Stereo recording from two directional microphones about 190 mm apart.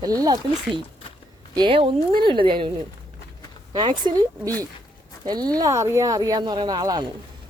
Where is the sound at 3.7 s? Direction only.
25° right (ahead or behind).